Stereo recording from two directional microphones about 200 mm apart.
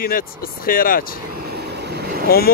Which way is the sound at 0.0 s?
45° left (ahead or behind).